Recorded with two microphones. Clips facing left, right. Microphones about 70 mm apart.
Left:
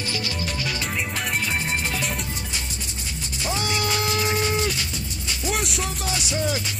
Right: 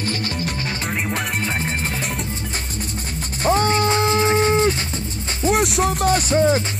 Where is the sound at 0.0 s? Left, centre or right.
Right.